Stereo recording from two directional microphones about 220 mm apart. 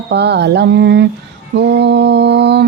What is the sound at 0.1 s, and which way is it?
Mantra, 50° right (ahead or behind).